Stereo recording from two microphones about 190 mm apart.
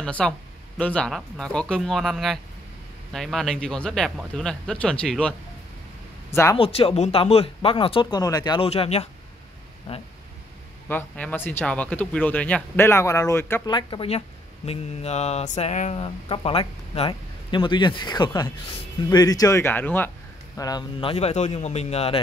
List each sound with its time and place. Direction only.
0.0 s speech: 5° left (ahead or behind)
6.3 s speech: 15° left (ahead or behind)
6.6 s speech: 30° left (ahead or behind)
10.9 s speech: 10° left (ahead or behind)
13.7 s speech: 25° left (ahead or behind)